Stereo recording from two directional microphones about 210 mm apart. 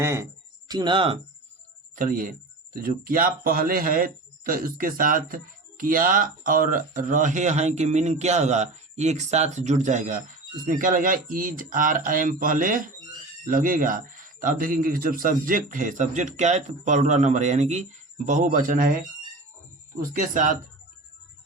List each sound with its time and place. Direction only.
0.0 s speech: 15° right (ahead or behind)
2.0 s speech: 40° right (ahead or behind)
20.0 s speech: 40° right (ahead or behind)